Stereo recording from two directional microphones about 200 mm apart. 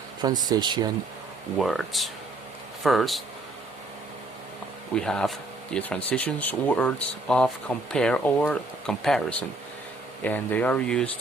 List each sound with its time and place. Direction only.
0.2 s speech: 20° right (ahead or behind)
1.5 s speech: centre (ahead or behind)
4.9 s speech: 5° left (ahead or behind)
10.2 s speech: 10° left (ahead or behind)